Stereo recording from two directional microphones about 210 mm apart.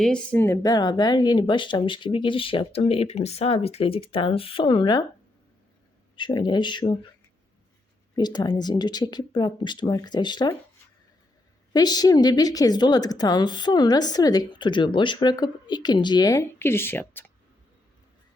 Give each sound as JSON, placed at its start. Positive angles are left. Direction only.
{"t": 0.0, "sound": "a woman's voice", "side_deg": 5}
{"t": 6.1, "sound": "a woman's voice", "side_deg": 20}
{"t": 8.1, "sound": "a woman's voice", "side_deg": 20}
{"t": 11.7, "sound": "a woman's voice", "side_deg": 20}